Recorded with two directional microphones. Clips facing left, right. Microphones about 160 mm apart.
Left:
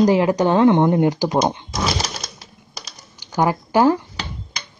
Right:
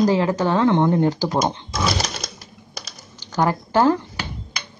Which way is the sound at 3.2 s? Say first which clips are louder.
Left 1 dB; 15° left (ahead or behind).